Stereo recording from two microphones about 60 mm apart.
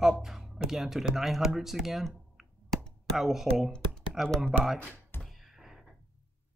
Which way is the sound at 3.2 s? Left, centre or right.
Centre.